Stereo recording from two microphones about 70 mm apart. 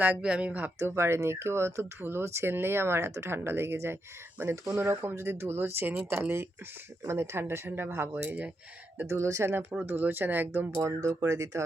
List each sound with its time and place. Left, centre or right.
0.2 s speech: centre
0.8 s speech: right
11.0 s speech: right